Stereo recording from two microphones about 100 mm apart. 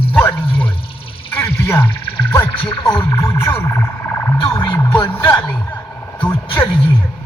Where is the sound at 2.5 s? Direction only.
55° left (ahead or behind).